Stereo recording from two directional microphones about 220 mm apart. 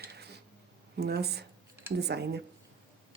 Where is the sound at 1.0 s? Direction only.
45° right (ahead or behind).